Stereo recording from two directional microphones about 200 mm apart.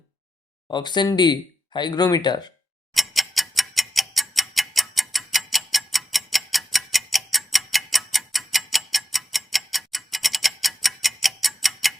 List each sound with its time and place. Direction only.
0.7 s speech: 20° left (ahead or behind)
2.9 s clock: centre (ahead or behind)